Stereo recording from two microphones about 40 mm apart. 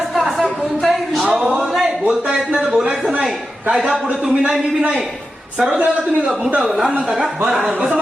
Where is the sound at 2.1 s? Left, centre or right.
Centre.